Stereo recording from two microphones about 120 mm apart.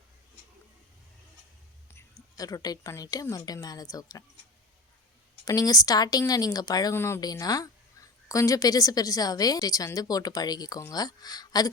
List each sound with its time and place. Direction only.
1.9 s a woman's voice: 25° left (ahead or behind)
5.5 s a woman's voice: 30° left (ahead or behind)
6.9 s a woman's voice: 25° left (ahead or behind)